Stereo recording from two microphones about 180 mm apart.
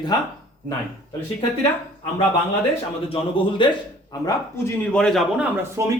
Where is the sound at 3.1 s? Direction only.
30° left (ahead or behind).